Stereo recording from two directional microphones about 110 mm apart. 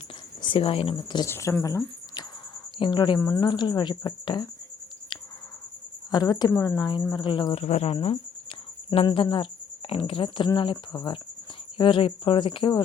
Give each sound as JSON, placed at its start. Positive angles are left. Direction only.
{"t": 0.4, "sound": "speech", "side_deg": 55}
{"t": 1.3, "sound": "speech", "side_deg": 25}
{"t": 2.7, "sound": "speech", "side_deg": 45}
{"t": 3.2, "sound": "speech", "side_deg": 30}
{"t": 3.4, "sound": "speech", "side_deg": 40}
{"t": 6.1, "sound": "a woman's voice", "side_deg": 35}
{"t": 7.5, "sound": "speech", "side_deg": 75}
{"t": 9.0, "sound": "speech", "side_deg": 50}